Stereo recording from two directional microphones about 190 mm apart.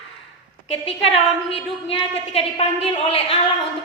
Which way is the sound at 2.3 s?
30° left (ahead or behind).